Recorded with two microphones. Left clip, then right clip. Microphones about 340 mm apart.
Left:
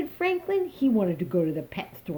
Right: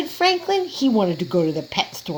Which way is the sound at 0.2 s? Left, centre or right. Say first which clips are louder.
Right 7 dB; right.